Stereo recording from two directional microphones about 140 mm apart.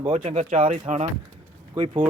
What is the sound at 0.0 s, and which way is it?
Speech, 55° right (ahead or behind).